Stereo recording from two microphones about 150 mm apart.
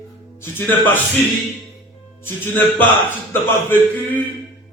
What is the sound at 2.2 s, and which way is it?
A man's voice, 15° left (ahead or behind).